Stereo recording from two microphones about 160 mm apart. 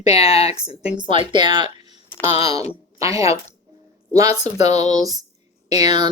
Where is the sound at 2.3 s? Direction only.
35° left (ahead or behind).